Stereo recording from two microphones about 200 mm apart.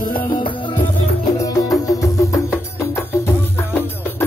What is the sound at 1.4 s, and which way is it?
Music, 15° left (ahead or behind).